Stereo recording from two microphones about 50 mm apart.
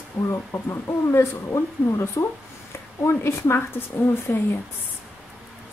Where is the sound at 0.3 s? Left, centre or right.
Left.